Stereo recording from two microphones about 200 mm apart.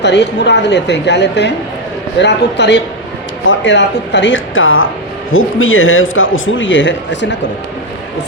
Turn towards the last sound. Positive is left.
turn(degrees=65)  # may be behind; listen again after turning